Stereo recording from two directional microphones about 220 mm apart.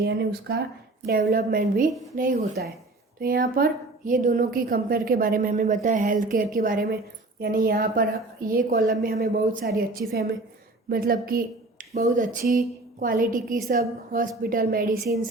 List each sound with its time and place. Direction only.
0.0 s a woman's voice: 45° right (ahead or behind)